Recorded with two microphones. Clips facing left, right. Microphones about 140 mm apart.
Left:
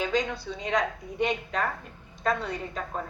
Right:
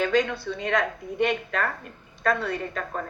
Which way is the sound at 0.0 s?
60° right (ahead or behind).